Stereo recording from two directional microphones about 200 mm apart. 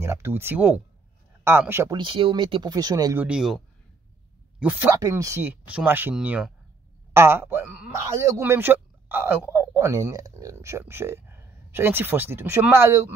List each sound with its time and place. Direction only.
0.0 s speech: 10° right (ahead or behind)
2.0 s speech: 25° right (ahead or behind)
3.3 s speech: 5° right (ahead or behind)